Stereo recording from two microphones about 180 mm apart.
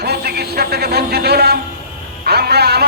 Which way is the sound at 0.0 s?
60° right (ahead or behind).